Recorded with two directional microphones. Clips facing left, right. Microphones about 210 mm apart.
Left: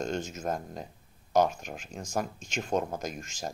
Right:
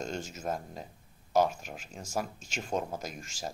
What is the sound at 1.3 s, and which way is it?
Speech, 5° right (ahead or behind).